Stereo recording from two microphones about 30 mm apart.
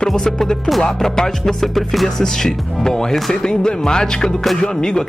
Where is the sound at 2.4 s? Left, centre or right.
Left.